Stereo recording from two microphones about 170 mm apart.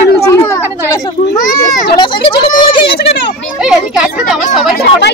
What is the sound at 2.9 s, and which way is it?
Speech, 80° left.